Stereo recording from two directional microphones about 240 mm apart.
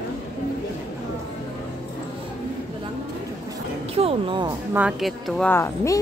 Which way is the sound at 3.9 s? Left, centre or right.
Right.